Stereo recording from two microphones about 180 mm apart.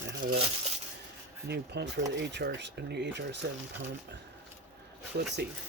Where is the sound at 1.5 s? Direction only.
70° right (ahead or behind).